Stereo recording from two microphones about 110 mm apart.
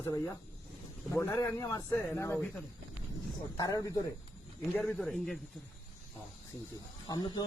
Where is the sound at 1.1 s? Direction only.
25° left (ahead or behind).